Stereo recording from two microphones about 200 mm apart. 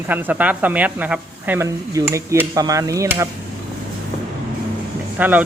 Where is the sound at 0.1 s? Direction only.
10° right (ahead or behind).